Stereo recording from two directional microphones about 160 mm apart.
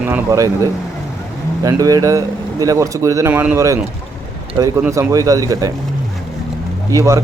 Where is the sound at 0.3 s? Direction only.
20° right (ahead or behind).